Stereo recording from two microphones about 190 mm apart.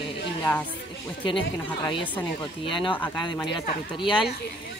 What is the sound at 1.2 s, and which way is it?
Speech, 25° left (ahead or behind).